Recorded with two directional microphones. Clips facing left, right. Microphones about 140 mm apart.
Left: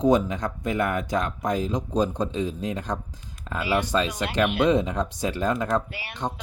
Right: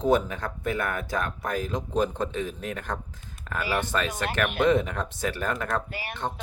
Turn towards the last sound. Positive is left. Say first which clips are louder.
# right 3 dB
turn(degrees=-45)  # may be behind; listen again after turning